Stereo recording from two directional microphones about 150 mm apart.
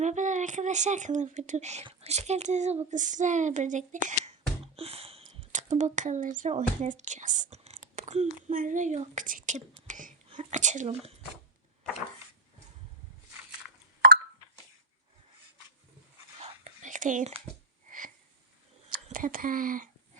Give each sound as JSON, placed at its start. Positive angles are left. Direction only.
{"t": 0.0, "sound": "speech", "side_deg": -55}
{"t": 1.8, "sound": "a child's voice", "side_deg": -40}
{"t": 4.6, "sound": "speech", "side_deg": -40}
{"t": 7.8, "sound": "a sound", "side_deg": -50}
{"t": 8.5, "sound": "a child's voice", "side_deg": -60}
{"t": 16.4, "sound": "whispering", "side_deg": -55}
{"t": 17.8, "sound": "wheeze", "side_deg": -65}
{"t": 19.1, "sound": "speech", "side_deg": -65}